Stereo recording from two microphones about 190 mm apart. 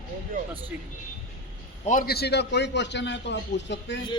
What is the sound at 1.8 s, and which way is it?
A man's voice, 50° left (ahead or behind).